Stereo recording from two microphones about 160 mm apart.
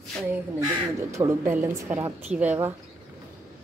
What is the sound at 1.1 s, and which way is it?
A woman's voice, 15° right (ahead or behind).